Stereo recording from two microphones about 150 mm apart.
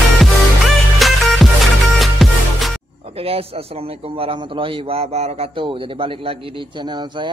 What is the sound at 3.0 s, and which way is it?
A man's voice, 40° right (ahead or behind).